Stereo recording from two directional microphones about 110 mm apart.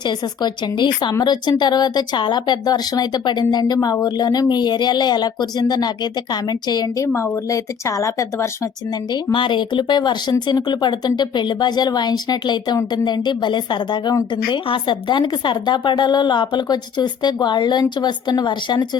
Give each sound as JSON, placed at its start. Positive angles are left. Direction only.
{"t": 0.0, "sound": "speech", "side_deg": 40}
{"t": 7.1, "sound": "speech", "side_deg": 25}
{"t": 9.3, "sound": "a woman's voice", "side_deg": 50}